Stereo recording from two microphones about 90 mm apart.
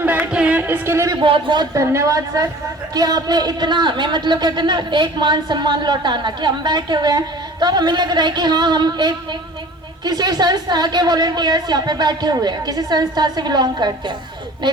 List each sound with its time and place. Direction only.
0.0 s music: 20° right (ahead or behind)
1.2 s a man's voice: 65° right (ahead or behind)
1.7 s a woman's voice: 30° right (ahead or behind); by 13.9 s 50° right (ahead or behind)